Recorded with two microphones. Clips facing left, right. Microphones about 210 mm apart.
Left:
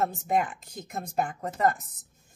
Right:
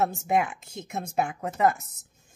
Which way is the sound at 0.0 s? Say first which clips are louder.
Right 2 dB; 5° right (ahead or behind).